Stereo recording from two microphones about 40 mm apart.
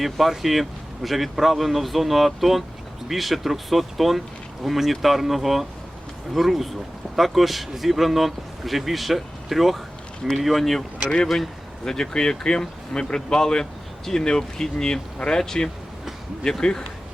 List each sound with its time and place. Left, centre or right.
0.0 s a man's voice: centre
11.9 s speech: centre